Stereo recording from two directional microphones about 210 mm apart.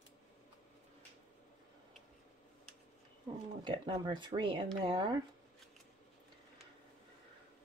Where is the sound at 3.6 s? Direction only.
20° right (ahead or behind).